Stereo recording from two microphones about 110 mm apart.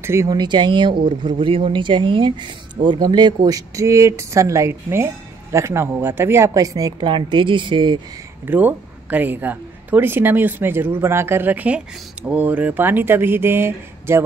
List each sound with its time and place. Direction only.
0.0 s speech: 25° right (ahead or behind)
0.3 s speech: 40° right (ahead or behind)
7.0 s speech: 45° right (ahead or behind)
8.5 s a woman's voice: 15° right (ahead or behind)